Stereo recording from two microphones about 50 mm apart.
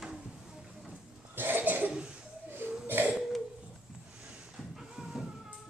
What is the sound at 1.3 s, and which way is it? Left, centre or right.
Cough, right.